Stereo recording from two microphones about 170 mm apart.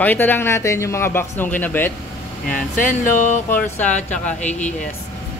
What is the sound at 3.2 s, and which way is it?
Speech, 10° left (ahead or behind).